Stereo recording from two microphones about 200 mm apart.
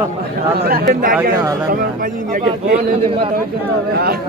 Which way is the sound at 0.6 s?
45° right (ahead or behind).